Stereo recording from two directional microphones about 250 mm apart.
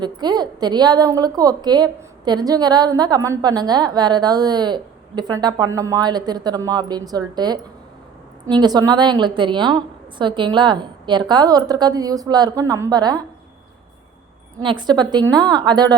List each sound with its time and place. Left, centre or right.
0.0 s a woman's voice: centre
14.6 s a woman's voice: centre